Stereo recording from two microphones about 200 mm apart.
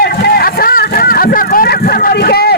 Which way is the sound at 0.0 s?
50° left (ahead or behind).